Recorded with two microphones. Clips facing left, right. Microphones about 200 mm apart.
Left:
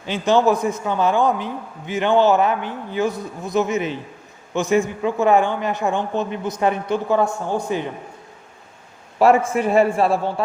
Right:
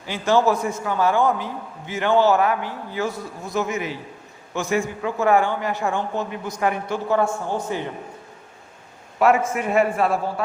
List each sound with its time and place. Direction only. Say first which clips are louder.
0.0 s a man's voice: left 2 dB; 20° left (ahead or behind)
9.1 s a man's voice: left 3 dB; 30° left (ahead or behind)